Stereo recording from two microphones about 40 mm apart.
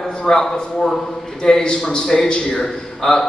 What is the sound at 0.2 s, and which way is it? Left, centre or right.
A man's voice, centre.